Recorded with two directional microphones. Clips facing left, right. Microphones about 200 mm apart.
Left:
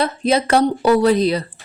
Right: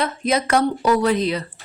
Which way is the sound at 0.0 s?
30° left (ahead or behind).